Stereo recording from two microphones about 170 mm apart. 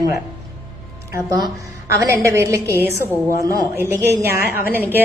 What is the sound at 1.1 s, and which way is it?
A woman's voice, 20° right (ahead or behind).